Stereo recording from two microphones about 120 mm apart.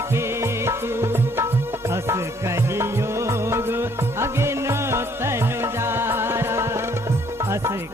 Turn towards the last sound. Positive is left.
turn(degrees=-20)  # may be behind; listen again after turning